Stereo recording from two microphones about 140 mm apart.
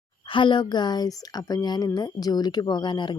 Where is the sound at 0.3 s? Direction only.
35° left (ahead or behind).